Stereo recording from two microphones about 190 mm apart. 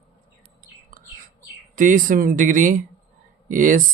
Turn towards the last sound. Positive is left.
turn(degrees=-45)  # may be behind; listen again after turning